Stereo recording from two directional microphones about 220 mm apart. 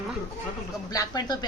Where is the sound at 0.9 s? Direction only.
15° left (ahead or behind).